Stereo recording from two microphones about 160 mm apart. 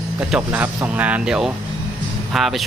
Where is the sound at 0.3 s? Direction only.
5° right (ahead or behind).